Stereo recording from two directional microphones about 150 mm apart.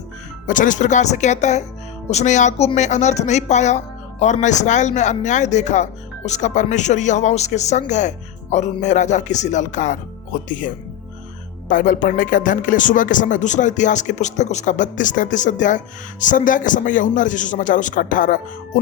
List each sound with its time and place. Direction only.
0.4 s speech: 60° left (ahead or behind)
11.7 s speech: 65° left (ahead or behind)